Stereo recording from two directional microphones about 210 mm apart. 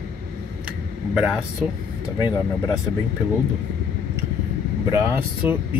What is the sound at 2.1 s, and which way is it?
Speech, 20° left (ahead or behind).